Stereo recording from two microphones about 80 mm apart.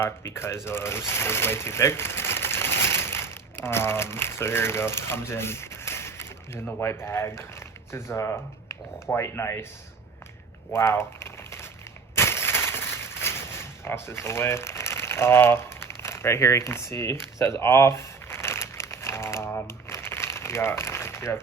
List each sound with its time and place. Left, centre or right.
0.0 s speech: left
10.7 s a sound: left
13.8 s speech: left
17.4 s crumpling: left